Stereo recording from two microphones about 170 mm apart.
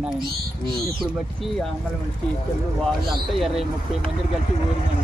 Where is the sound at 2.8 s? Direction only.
Centre (ahead or behind).